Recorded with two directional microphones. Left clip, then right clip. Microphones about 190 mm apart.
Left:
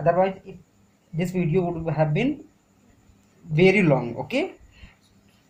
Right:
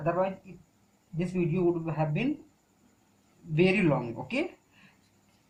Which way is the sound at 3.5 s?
45° left (ahead or behind).